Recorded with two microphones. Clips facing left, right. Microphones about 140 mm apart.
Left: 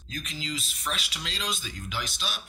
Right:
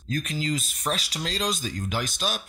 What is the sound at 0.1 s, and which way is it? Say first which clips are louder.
Speech: right 8 dB; 45° right (ahead or behind).